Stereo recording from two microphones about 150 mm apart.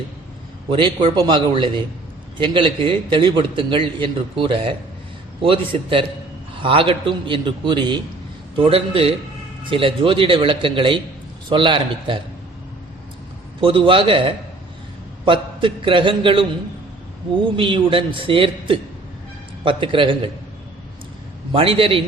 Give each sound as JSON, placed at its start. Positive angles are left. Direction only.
{"t": 0.7, "sound": "a man's voice", "side_deg": -35}
{"t": 13.6, "sound": "a man's voice", "side_deg": -35}
{"t": 17.6, "sound": "a man's voice", "side_deg": -35}
{"t": 21.5, "sound": "a man's voice", "side_deg": -40}